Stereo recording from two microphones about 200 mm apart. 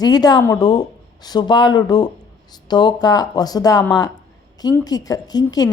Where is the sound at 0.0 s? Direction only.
20° left (ahead or behind).